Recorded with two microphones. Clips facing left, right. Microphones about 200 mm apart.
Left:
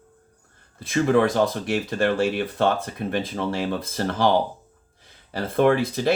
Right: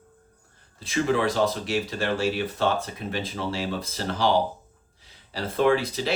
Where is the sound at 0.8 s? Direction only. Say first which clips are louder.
Left 5 dB; 55° left (ahead or behind).